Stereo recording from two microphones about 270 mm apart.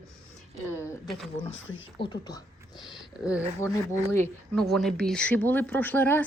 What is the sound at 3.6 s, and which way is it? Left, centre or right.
Speech, centre.